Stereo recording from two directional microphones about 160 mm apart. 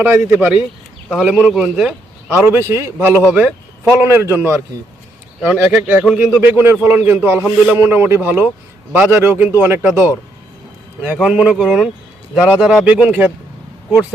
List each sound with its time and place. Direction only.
0.0 s a man's voice: 10° right (ahead or behind)
2.4 s a man's voice: 15° right (ahead or behind)
3.1 s speech: 15° left (ahead or behind)
4.0 s a man's voice: 15° right (ahead or behind)